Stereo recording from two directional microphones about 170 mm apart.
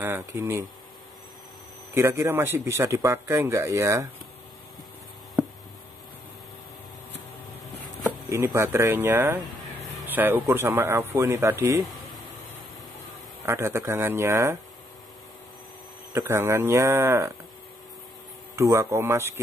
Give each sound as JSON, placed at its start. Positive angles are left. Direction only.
{"t": 0.0, "sound": "speech", "side_deg": -15}
{"t": 2.0, "sound": "speech", "side_deg": -15}
{"t": 8.3, "sound": "speech", "side_deg": -15}
{"t": 13.5, "sound": "speech", "side_deg": -15}
{"t": 16.1, "sound": "speech", "side_deg": -15}
{"t": 18.6, "sound": "speech", "side_deg": -15}